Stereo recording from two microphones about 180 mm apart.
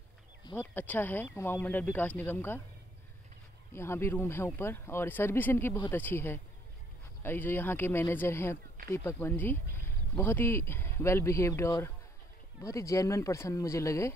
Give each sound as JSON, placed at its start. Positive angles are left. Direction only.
{"t": 0.6, "sound": "speech", "side_deg": 10}
{"t": 3.7, "sound": "speech", "side_deg": 15}